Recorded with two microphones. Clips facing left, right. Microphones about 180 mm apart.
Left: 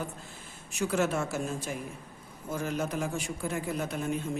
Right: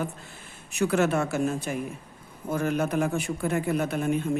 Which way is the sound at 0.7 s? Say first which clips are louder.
Right 5 dB; 65° right (ahead or behind).